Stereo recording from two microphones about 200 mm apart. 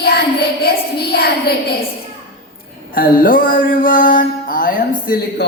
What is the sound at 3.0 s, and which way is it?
A child's voice, 45° left (ahead or behind).